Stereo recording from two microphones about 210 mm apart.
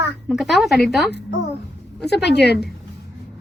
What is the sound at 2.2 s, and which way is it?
Speech, 55° left (ahead or behind).